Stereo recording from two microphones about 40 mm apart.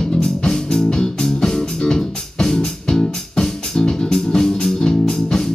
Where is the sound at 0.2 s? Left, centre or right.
Centre.